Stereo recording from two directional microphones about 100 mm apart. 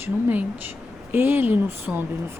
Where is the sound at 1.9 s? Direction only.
5° right (ahead or behind).